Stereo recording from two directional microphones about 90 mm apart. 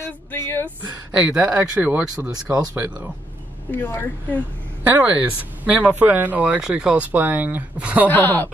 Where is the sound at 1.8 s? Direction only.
20° right (ahead or behind).